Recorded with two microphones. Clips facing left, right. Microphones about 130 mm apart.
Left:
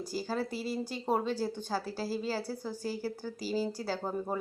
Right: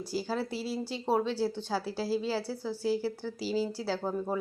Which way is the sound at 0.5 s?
50° left (ahead or behind).